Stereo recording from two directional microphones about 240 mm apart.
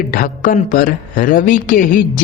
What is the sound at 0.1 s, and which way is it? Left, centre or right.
Speech, left.